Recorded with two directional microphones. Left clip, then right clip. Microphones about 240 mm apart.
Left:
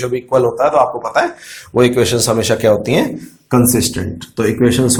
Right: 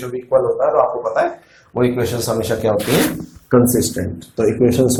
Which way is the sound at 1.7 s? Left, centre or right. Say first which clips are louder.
Left 6 dB; left.